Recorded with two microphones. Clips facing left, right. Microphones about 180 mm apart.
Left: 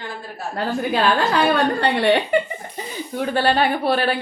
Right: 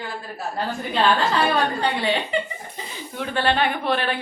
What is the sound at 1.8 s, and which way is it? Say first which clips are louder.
Speech: left 5 dB; 65° left (ahead or behind).